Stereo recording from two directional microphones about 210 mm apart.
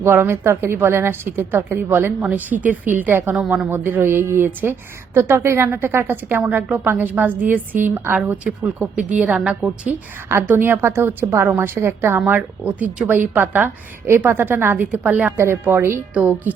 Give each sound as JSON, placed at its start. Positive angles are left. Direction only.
{"t": 0.0, "sound": "a woman's voice", "side_deg": -10}